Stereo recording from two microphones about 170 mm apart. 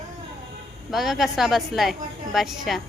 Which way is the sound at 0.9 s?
Centre (ahead or behind).